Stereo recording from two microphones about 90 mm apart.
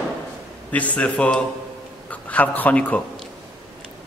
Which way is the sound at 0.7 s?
15° left (ahead or behind).